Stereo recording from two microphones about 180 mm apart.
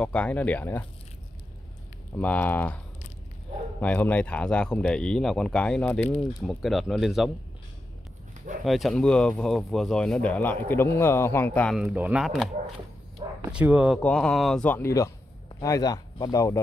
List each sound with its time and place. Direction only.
0.0 s speech: 10° left (ahead or behind)
2.1 s speech: 10° left (ahead or behind)
3.8 s speech: 10° left (ahead or behind)
8.6 s speech: centre (ahead or behind)
13.5 s speech: 5° right (ahead or behind)
13.9 s speech: 5° left (ahead or behind)